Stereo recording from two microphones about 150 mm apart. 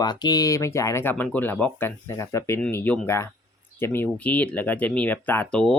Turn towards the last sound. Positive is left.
turn(degrees=5)  # may be behind; listen again after turning